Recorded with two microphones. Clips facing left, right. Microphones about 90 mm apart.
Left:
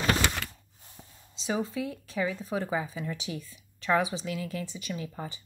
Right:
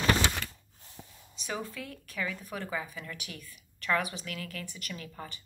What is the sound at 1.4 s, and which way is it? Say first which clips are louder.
Speech: left 7 dB; 20° left (ahead or behind).